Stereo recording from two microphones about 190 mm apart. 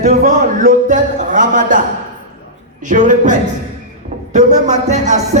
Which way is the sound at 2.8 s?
40° right (ahead or behind).